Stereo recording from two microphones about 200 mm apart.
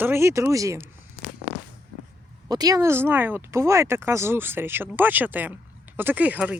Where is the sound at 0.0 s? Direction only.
10° right (ahead or behind).